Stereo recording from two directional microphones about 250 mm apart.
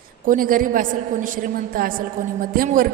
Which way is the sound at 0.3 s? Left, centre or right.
Right.